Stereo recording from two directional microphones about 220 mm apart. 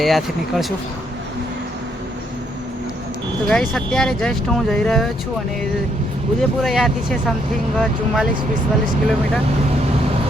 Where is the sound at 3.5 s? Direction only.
Centre (ahead or behind).